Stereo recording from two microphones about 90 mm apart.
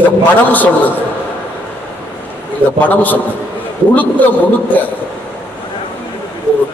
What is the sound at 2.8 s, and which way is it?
A man's voice, 20° left (ahead or behind).